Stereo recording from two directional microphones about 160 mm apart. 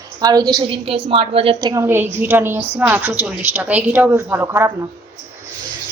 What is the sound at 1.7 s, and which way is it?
A woman's voice, 15° right (ahead or behind).